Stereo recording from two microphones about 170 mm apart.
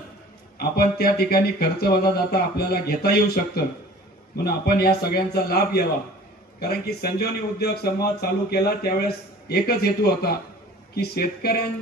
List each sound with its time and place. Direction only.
0.6 s speech: 65° left (ahead or behind)
6.9 s speech: 70° left (ahead or behind)